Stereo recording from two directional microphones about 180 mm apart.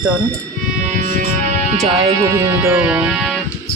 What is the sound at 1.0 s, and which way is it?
Music, 45° right (ahead or behind).